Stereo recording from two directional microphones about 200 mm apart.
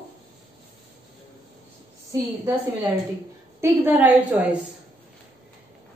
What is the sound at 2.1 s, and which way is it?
A woman's voice, 15° right (ahead or behind).